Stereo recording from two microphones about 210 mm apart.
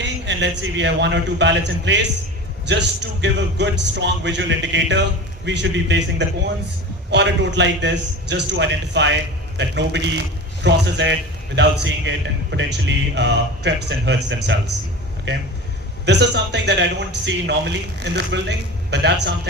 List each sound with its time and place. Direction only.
0.0 s a man's voice: 55° right (ahead or behind)